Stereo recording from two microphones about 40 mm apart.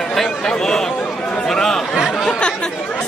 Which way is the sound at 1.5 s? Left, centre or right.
Centre.